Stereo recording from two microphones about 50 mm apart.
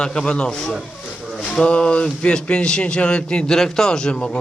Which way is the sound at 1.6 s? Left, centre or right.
Left.